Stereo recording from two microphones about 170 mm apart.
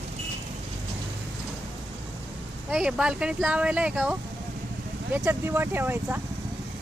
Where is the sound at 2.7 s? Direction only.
5° right (ahead or behind).